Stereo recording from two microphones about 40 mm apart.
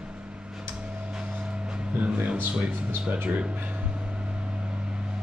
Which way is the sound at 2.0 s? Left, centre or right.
Right.